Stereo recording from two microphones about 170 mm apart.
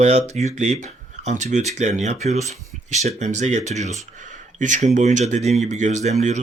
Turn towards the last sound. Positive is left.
turn(degrees=-45)  # may be behind; listen again after turning